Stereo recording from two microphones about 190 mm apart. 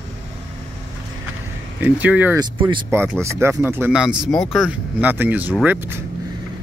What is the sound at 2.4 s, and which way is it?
Speech, 25° right (ahead or behind).